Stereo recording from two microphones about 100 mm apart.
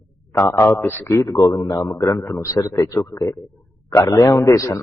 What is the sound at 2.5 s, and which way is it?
A man's voice, 35° left (ahead or behind).